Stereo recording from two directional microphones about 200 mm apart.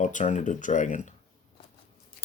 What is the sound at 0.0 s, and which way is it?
Speech, 40° left (ahead or behind).